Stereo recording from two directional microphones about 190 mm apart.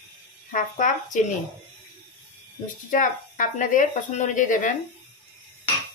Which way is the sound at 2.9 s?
45° left (ahead or behind).